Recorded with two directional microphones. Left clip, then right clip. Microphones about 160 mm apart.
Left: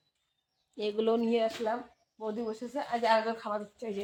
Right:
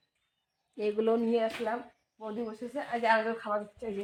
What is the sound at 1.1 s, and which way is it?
Speech, 10° right (ahead or behind).